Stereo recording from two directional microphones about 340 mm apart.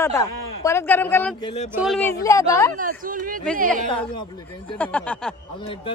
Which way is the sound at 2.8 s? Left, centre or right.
Right.